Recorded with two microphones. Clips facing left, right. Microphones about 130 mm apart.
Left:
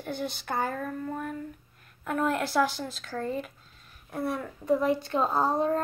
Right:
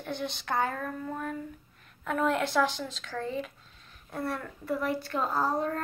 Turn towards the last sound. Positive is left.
turn(degrees=25)  # may be behind; listen again after turning